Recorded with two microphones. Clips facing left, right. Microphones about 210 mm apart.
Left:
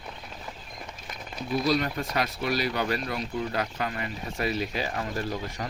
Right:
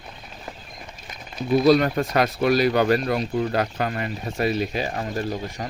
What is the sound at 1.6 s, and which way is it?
Speech, 55° right (ahead or behind).